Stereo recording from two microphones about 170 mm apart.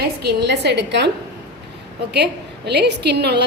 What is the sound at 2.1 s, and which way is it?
Speech, 80° right.